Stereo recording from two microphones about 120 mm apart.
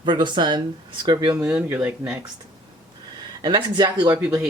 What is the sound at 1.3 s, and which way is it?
Speech, 15° right (ahead or behind).